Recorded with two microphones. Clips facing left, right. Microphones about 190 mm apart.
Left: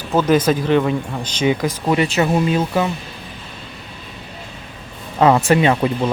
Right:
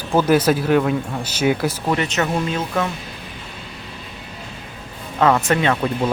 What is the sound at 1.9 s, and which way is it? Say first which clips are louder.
Speech: left 5 dB; 10° left (ahead or behind).